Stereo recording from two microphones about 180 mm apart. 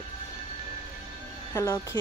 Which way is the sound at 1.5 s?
15° left (ahead or behind).